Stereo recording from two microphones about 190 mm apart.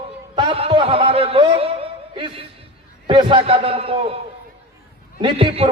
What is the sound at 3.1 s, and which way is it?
Speech, 25° right (ahead or behind).